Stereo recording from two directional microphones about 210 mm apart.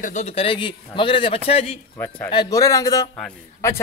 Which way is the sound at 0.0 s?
35° left (ahead or behind).